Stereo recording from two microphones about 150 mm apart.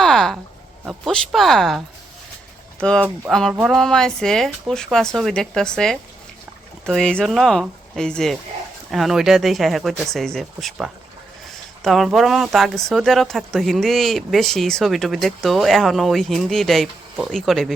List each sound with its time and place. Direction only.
0.0 s a sound: 5° left (ahead or behind)
0.9 s speech: centre (ahead or behind)
2.8 s speech: 5° left (ahead or behind)